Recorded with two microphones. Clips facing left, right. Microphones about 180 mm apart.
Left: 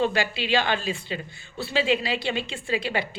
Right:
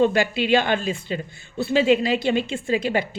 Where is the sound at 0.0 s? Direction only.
50° right (ahead or behind).